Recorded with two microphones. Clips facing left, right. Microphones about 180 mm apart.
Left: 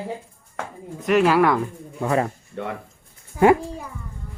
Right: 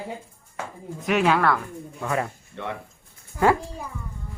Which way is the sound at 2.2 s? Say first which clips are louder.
Left 4 dB; 45° left (ahead or behind).